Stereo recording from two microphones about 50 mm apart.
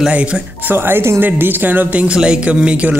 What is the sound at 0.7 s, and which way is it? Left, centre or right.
Speech, right.